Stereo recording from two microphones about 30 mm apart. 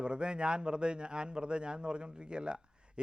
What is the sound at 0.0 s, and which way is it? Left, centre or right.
A man's voice, right.